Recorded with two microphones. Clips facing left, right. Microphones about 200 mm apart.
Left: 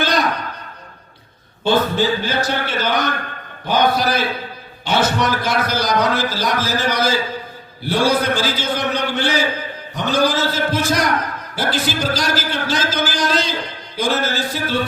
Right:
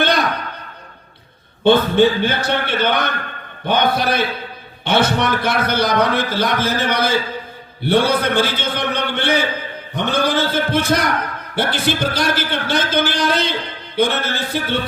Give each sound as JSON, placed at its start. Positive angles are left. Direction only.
{"t": 1.6, "sound": "a man's voice", "side_deg": -60}